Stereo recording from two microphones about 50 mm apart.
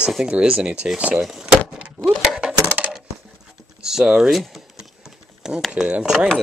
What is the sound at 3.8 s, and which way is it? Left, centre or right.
Speech, centre.